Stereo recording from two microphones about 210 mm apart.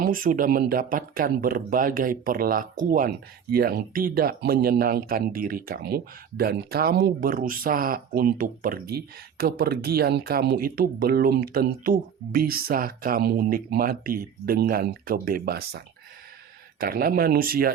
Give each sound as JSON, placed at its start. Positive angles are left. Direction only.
{"t": 0.0, "sound": "speech", "side_deg": -40}
{"t": 16.8, "sound": "speech", "side_deg": -45}